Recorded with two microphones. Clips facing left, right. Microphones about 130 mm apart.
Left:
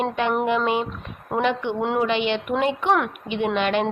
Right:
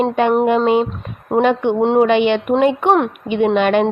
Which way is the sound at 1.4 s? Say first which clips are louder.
Right 8 dB; 50° right (ahead or behind).